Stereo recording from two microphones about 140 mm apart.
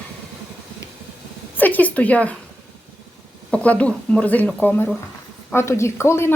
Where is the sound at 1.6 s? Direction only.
10° left (ahead or behind).